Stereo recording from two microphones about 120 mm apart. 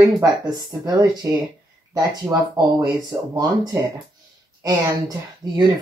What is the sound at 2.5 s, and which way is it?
Speech, 30° right (ahead or behind).